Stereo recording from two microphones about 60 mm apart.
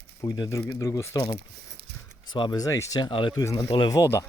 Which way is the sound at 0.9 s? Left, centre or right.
Left.